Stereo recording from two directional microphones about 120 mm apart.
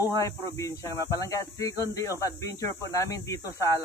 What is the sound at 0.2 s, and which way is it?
Speech, 25° left (ahead or behind).